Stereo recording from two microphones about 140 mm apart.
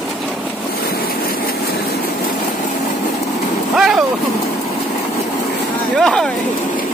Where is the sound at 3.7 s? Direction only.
5° right (ahead or behind).